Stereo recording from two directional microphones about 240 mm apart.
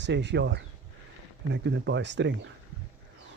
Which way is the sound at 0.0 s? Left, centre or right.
Right.